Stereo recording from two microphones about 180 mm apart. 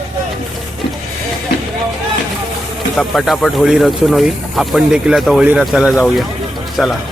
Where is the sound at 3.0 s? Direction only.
Centre (ahead or behind).